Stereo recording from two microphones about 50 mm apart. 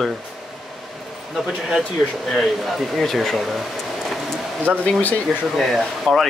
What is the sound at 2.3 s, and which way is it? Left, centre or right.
Speech, centre.